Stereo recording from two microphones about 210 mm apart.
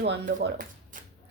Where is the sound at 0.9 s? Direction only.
40° right (ahead or behind).